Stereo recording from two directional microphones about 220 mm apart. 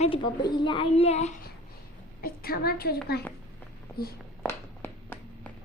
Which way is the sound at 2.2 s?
45° left (ahead or behind).